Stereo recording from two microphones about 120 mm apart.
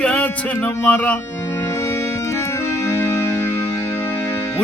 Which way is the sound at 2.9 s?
20° left (ahead or behind).